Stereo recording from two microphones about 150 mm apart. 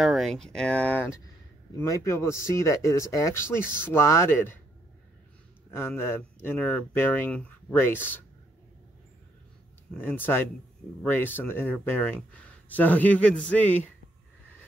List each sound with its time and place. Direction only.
0.0 s speech: centre (ahead or behind); by 4.6 s 15° left (ahead or behind)
5.7 s speech: 15° left (ahead or behind)
9.9 s speech: 10° left (ahead or behind)